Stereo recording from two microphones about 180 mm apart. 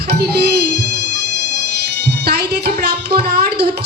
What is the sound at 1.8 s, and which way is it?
Speech, 60° right (ahead or behind).